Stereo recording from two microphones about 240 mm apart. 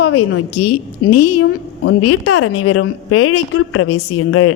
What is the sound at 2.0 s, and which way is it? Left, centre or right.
A woman's voice, left.